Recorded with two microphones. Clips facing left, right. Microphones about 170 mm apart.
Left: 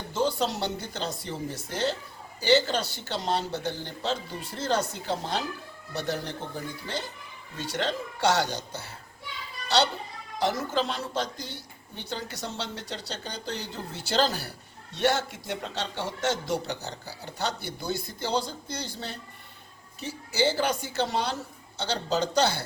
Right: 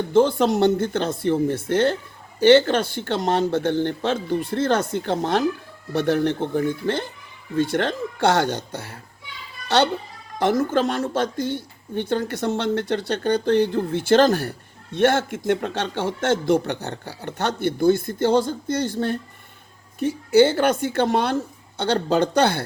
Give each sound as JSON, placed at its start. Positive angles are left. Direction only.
{"t": 0.1, "sound": "a child's voice", "side_deg": -55}